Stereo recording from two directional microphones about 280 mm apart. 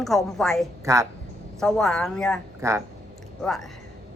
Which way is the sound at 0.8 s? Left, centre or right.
Centre.